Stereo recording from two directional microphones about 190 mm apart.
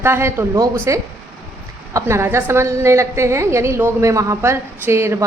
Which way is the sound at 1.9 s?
15° right (ahead or behind).